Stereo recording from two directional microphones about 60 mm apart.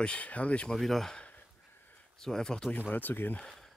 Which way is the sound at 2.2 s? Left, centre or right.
Centre.